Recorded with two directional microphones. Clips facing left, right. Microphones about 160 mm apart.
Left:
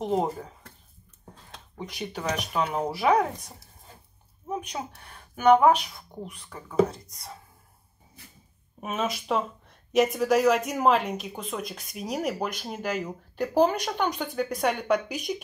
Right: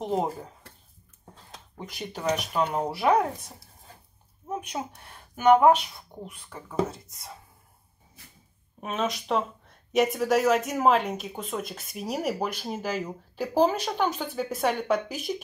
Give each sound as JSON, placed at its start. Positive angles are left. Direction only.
{"t": 0.0, "sound": "speech", "side_deg": 0}
{"t": 2.0, "sound": "speech", "side_deg": 0}
{"t": 4.5, "sound": "a sound", "side_deg": -5}
{"t": 5.3, "sound": "speech", "side_deg": 0}
{"t": 8.8, "sound": "speech", "side_deg": 5}